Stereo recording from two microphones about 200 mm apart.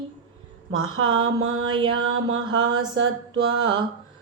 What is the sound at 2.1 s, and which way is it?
Music, 75° right (ahead or behind).